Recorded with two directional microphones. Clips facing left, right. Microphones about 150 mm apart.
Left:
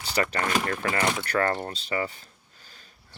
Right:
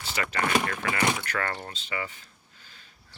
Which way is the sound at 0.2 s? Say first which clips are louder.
Left 1 dB; 35° left (ahead or behind).